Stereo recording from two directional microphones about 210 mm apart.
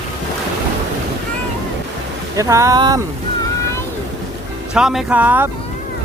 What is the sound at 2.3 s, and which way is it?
Speech, 15° right (ahead or behind).